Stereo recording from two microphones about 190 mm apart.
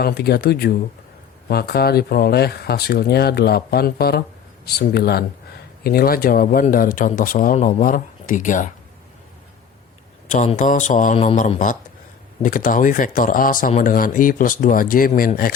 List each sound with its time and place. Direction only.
0.0 s speech: 55° left (ahead or behind)
10.2 s a man's voice: 40° left (ahead or behind)